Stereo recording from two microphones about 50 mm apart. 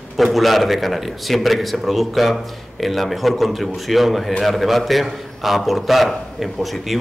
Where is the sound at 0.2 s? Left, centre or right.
Centre.